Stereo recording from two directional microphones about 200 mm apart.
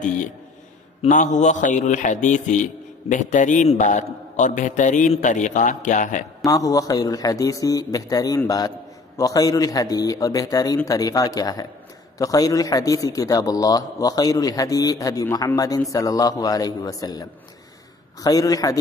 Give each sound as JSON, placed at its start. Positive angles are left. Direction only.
{"t": 1.0, "sound": "a man's voice", "side_deg": 40}
{"t": 6.4, "sound": "a man's voice", "side_deg": 15}